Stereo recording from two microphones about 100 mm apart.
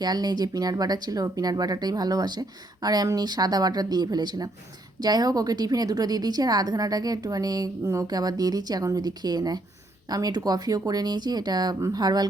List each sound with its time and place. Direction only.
0.0 s a woman's voice: 40° right (ahead or behind)